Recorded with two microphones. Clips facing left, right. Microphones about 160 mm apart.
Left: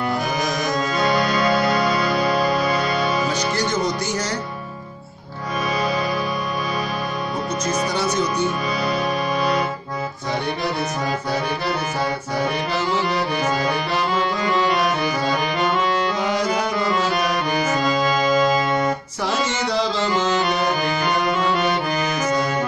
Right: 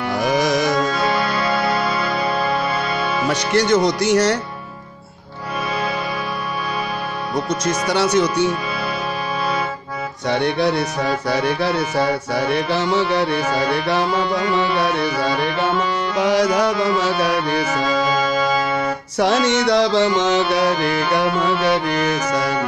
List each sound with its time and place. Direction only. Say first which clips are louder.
0.2 s music: right 6 dB; 80° right
1.7 s music: left 1 dB; 5° right (ahead or behind)
3.3 s music: right 5 dB; 70° right (ahead or behind)
7.6 s music: right 3 dB; 75° right (ahead or behind)
10.3 s music: right 7 dB; 75° right (ahead or behind)
16.2 s music: right 5 dB; 75° right (ahead or behind)
19.1 s music: right 7 dB; 70° right (ahead or behind)